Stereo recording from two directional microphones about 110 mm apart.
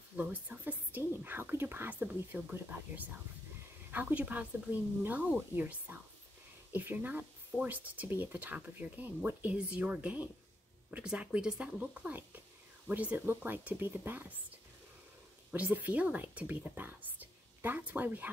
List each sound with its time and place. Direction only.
0.1 s speech: 15° right (ahead or behind)
15.5 s speech: 15° right (ahead or behind)